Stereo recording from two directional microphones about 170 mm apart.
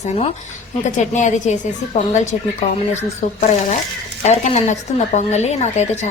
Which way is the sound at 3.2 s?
45° left (ahead or behind).